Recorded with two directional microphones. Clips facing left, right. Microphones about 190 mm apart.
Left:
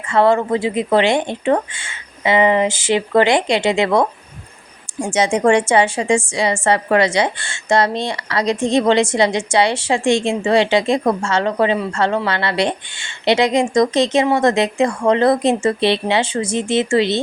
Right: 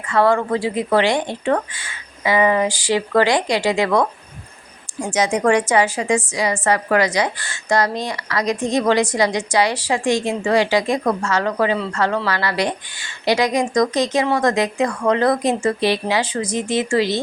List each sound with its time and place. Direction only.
0.1 s a woman's voice: 25° left (ahead or behind)